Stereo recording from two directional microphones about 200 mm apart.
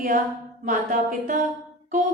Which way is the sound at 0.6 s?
40° right (ahead or behind).